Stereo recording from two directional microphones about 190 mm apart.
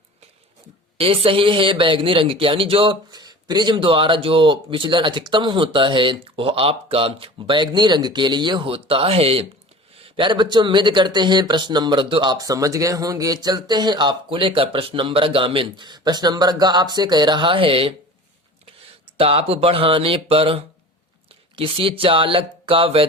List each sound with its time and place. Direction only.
0.9 s speech: 30° right (ahead or behind)
19.1 s speech: 30° right (ahead or behind)